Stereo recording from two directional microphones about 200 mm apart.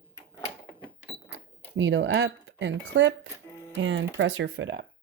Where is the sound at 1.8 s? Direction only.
65° right (ahead or behind).